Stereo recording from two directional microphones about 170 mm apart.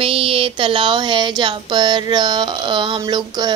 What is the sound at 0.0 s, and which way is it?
Speech, 35° right (ahead or behind).